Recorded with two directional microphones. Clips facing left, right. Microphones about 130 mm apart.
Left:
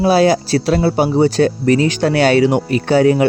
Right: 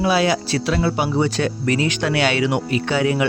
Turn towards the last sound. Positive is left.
turn(degrees=40)  # may be behind; listen again after turning